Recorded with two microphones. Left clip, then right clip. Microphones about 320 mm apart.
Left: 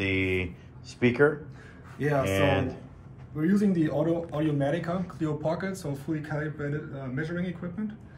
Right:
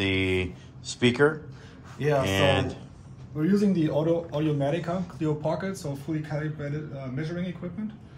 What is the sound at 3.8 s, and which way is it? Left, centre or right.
Speech, centre.